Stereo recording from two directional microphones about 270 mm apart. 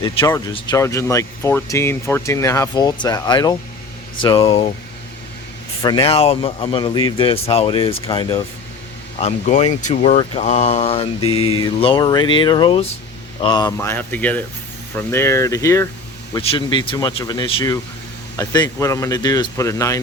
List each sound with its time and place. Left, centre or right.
0.0 s speech: centre
5.8 s speech: centre
11.2 s mantra: left
11.5 s speech: centre